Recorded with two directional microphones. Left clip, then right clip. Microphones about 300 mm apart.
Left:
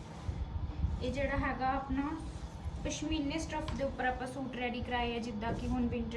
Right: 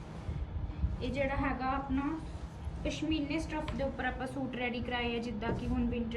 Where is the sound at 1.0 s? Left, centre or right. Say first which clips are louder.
Right 1 dB; centre.